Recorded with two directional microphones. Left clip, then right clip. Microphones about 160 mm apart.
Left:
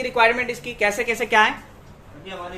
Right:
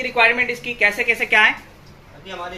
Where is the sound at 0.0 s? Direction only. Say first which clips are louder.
Right 2 dB; 15° left (ahead or behind).